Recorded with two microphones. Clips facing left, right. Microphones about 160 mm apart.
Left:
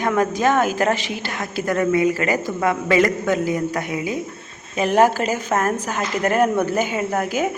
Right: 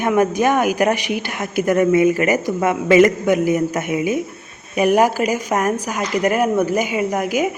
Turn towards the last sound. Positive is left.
turn(degrees=-10)  # may be behind; listen again after turning